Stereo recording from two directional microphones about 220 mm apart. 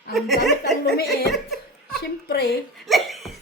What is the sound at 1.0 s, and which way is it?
Laughter, centre (ahead or behind).